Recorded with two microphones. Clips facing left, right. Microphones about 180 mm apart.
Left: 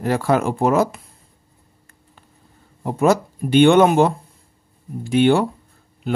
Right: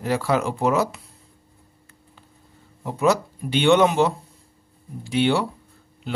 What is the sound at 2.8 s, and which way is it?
Speech, 50° left (ahead or behind).